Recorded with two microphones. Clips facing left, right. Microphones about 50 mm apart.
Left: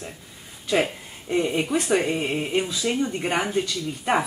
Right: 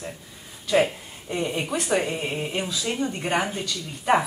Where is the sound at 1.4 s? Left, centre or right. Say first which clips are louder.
Left 4 dB; centre.